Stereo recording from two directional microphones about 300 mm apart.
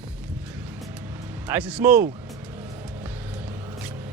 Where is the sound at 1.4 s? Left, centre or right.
Centre.